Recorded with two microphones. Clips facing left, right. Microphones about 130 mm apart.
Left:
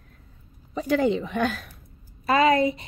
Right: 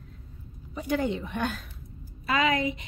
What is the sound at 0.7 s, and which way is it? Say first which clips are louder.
A woman's voice: left 6 dB; 90° left.